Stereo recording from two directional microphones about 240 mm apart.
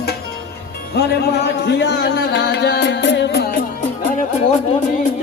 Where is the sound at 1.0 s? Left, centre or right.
Left.